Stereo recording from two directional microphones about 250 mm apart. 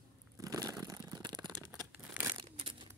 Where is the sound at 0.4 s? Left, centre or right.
Centre.